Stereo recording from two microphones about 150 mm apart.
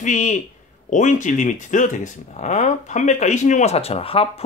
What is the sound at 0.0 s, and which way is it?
A man's voice, 55° left (ahead or behind).